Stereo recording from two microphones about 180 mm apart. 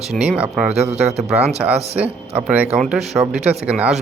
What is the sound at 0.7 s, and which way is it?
Speech, 35° right (ahead or behind).